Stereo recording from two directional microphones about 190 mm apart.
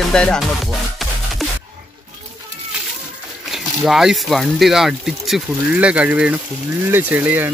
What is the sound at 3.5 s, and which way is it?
Speech, centre (ahead or behind).